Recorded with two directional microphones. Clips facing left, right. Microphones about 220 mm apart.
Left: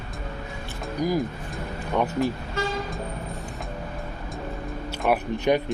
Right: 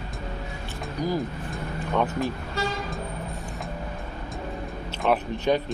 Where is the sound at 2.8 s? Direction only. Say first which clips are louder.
Left 1 dB; centre (ahead or behind).